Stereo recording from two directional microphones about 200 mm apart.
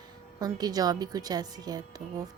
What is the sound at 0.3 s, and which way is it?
A woman's voice, 20° right (ahead or behind).